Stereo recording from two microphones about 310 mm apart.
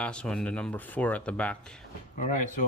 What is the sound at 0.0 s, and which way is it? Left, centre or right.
Speech, centre.